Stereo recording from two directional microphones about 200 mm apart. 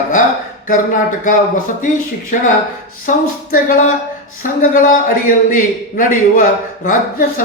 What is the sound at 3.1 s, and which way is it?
A man's voice, 40° left (ahead or behind).